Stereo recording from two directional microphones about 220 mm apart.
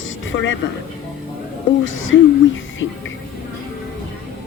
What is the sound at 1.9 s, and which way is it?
Speech, 60° left (ahead or behind).